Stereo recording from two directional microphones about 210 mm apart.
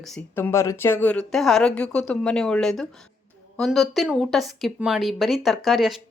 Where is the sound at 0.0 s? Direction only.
5° left (ahead or behind).